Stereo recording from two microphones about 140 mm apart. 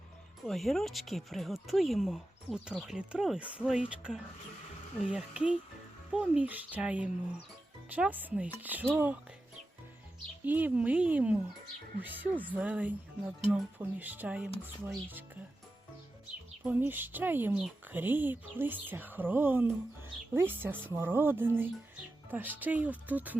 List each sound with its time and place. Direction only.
0.4 s speech: centre (ahead or behind); by 9.1 s 15° right (ahead or behind)
10.4 s speech: 10° right (ahead or behind)
16.6 s speech: 15° right (ahead or behind)